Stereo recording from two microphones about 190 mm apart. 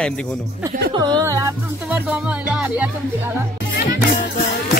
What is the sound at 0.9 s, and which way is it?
Speech, 20° right (ahead or behind).